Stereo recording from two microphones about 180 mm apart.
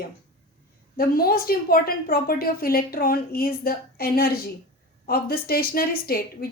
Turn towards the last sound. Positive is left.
turn(degrees=55)  # may be behind; listen again after turning